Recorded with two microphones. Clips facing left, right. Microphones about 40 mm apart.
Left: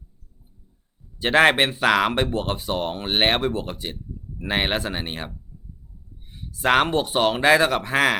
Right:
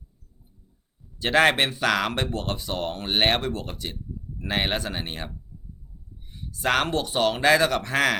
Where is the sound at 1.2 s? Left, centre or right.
Centre.